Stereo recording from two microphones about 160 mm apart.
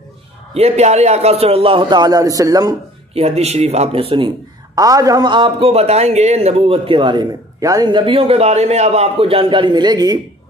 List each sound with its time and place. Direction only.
0.6 s a man's voice: 45° right (ahead or behind); by 2.7 s 20° right (ahead or behind)
3.2 s a man's voice: 40° right (ahead or behind)
4.7 s a man's voice: 20° right (ahead or behind)